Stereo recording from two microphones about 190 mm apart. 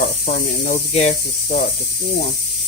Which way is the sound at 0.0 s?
50° left (ahead or behind).